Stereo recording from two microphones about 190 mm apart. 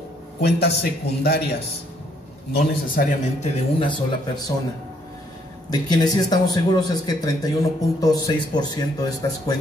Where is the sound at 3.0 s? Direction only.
50° left (ahead or behind).